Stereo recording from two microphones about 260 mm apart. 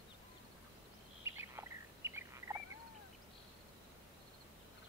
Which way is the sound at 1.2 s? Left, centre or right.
Centre.